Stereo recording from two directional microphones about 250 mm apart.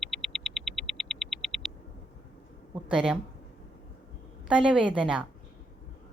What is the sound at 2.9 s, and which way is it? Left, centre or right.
Speech, centre.